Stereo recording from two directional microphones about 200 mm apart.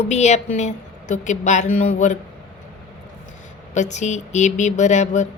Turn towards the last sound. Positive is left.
turn(degrees=35)  # may be behind; listen again after turning